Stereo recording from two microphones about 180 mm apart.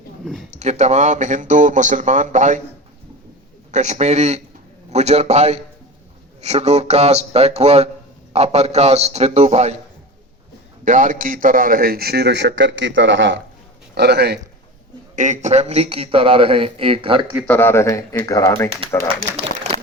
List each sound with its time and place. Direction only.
0.5 s speech: 40° right (ahead or behind)
3.7 s a man's voice: 40° right (ahead or behind)
10.8 s a man's voice: 45° right (ahead or behind); by 13.4 s 90° right
13.9 s a man's voice: 65° right (ahead or behind)
15.1 s a man's voice: 45° right (ahead or behind)
17.4 s speech: 10° left (ahead or behind)